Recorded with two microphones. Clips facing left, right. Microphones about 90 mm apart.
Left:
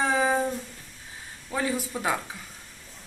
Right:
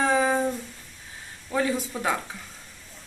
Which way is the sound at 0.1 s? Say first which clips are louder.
Right 1 dB; 5° left (ahead or behind).